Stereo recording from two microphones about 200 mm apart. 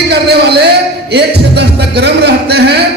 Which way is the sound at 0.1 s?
55° right (ahead or behind).